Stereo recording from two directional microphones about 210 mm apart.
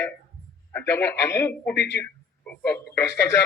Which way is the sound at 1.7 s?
50° left (ahead or behind).